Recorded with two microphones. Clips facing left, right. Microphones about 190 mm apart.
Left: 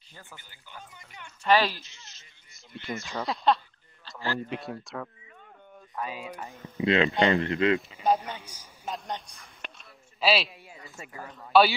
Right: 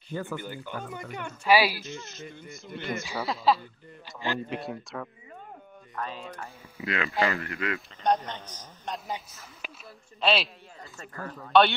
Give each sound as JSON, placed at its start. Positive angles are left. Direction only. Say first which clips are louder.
{"t": 0.1, "sound": "speech", "louder": "right 18 dB", "side_deg": -65}
{"t": 1.4, "sound": "speech", "louder": "right 1 dB", "side_deg": -10}
{"t": 1.9, "sound": "speech", "louder": "right 19 dB", "side_deg": -50}
{"t": 3.1, "sound": "a man's voice", "louder": "even", "side_deg": 0}
{"t": 4.0, "sound": "speech", "louder": "right 1 dB", "side_deg": -20}
{"t": 4.5, "sound": "a man's voice", "louder": "right 1 dB", "side_deg": 0}
{"t": 6.8, "sound": "speech", "louder": "left 5 dB", "side_deg": 25}
{"t": 8.0, "sound": "a man's voice", "louder": "left 1 dB", "side_deg": 5}
{"t": 11.5, "sound": "a man's voice", "louder": "even", "side_deg": 5}